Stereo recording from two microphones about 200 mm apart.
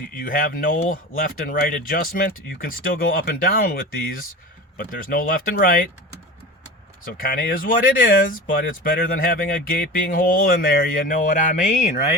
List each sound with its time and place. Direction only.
0.2 s speech: 45° left (ahead or behind)
7.0 s speech: 45° left (ahead or behind)